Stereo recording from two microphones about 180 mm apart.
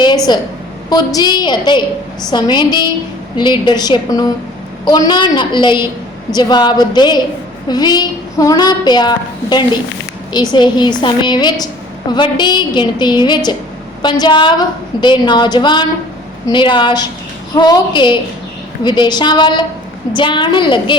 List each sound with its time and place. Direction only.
0.3 s a woman's voice: 25° left (ahead or behind)